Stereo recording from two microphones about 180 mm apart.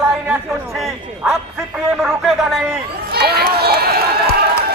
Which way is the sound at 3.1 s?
60° right (ahead or behind).